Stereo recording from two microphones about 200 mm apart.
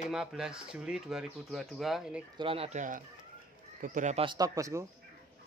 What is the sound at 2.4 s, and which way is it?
Speech, 30° right (ahead or behind).